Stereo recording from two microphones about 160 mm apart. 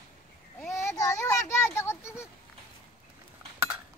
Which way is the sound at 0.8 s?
15° left (ahead or behind).